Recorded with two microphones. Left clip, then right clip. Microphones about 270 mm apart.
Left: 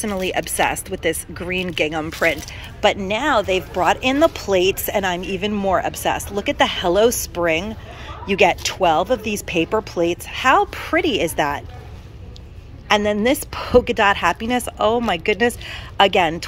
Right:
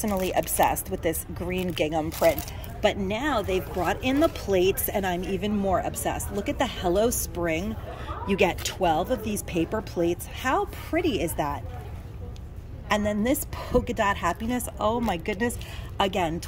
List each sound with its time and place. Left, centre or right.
0.2 s speech: centre
12.8 s speech: centre